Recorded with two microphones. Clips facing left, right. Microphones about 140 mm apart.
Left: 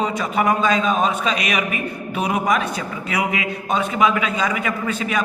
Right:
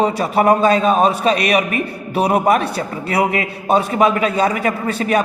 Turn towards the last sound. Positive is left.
turn(degrees=-35)  # may be behind; listen again after turning